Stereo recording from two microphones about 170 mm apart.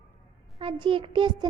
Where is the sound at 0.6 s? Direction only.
30° right (ahead or behind).